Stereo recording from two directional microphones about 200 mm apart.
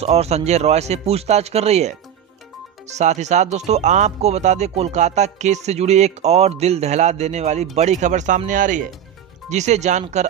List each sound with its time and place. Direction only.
0.0 s speech: 30° right (ahead or behind)